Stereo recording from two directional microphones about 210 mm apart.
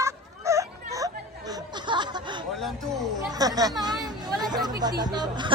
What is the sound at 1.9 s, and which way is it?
Chuckle, 20° right (ahead or behind).